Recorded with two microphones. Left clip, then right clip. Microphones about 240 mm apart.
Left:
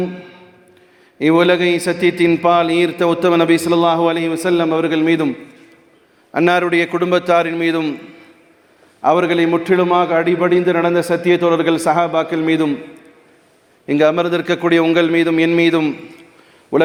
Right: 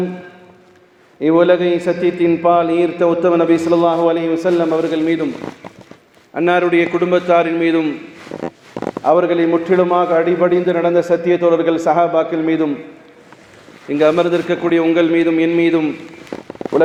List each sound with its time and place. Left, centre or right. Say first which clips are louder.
1.2 s a man's voice: right 1 dB; left
6.3 s a man's voice: even; left
9.0 s a man's voice: even; left
13.8 s a man's voice: right 1 dB; left